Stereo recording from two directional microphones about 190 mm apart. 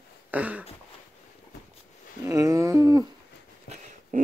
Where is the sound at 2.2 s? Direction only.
15° right (ahead or behind).